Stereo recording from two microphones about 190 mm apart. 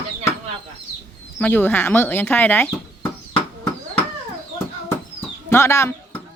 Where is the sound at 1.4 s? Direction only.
10° left (ahead or behind).